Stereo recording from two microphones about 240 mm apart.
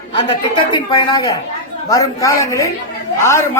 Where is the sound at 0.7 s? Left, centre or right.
Centre.